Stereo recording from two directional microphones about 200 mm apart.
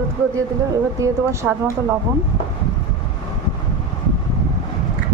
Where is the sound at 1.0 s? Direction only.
15° right (ahead or behind).